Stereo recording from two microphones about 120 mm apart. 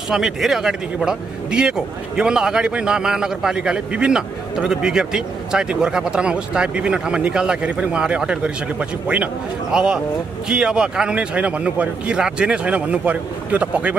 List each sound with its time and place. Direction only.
0.1 s speech: 5° right (ahead or behind)